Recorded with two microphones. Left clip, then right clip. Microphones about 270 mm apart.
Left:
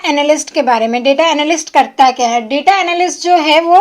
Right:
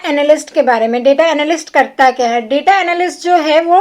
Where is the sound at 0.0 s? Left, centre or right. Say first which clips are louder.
Right 1 dB; left.